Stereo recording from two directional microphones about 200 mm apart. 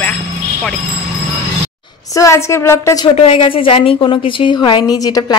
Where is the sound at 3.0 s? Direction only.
25° left (ahead or behind).